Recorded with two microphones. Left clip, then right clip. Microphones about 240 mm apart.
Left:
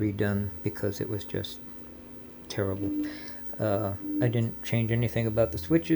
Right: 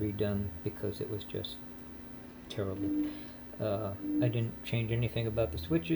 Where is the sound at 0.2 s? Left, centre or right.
Left.